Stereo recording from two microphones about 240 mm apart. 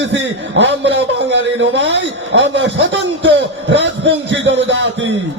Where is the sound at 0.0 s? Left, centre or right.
Right.